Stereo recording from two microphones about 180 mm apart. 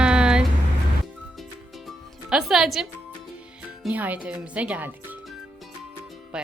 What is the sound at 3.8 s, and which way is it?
Speech, 10° right (ahead or behind).